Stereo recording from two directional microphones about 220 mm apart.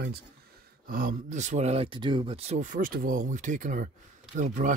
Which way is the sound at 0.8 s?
40° right (ahead or behind).